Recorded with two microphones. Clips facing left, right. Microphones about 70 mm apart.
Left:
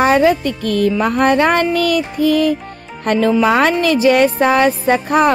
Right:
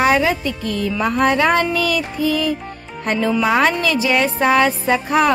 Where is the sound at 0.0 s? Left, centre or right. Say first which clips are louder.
Left 4 dB; left.